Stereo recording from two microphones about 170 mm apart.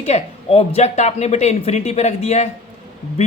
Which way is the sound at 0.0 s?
40° left (ahead or behind).